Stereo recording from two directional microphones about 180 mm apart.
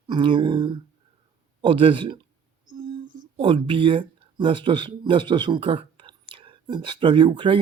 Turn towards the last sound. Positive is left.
turn(degrees=-30)  # may be behind; listen again after turning